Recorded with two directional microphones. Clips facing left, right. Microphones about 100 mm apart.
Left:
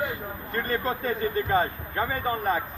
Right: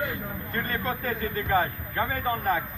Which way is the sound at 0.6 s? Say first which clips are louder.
Left 3 dB; 25° left (ahead or behind).